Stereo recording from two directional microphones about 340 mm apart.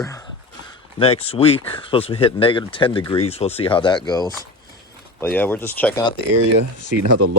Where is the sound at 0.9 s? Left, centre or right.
Centre.